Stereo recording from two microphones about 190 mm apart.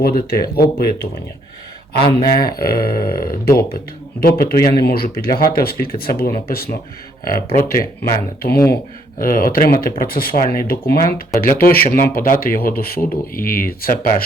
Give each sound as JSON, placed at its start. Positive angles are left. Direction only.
{"t": 0.0, "sound": "speech", "side_deg": 55}
{"t": 2.1, "sound": "speech", "side_deg": 55}